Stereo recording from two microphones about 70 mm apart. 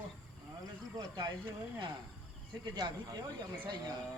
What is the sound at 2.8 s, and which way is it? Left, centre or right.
Speech, right.